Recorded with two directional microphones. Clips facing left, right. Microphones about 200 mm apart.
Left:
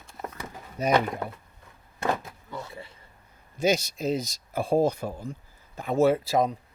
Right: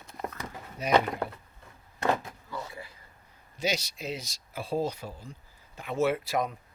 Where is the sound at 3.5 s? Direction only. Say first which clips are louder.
Left 7 dB; 50° left (ahead or behind).